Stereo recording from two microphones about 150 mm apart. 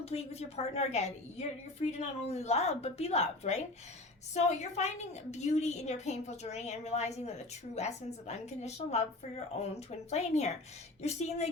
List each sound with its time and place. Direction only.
0.0 s a woman's voice: 45° left (ahead or behind)